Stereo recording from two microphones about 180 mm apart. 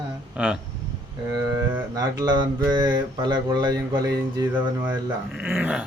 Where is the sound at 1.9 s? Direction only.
20° right (ahead or behind).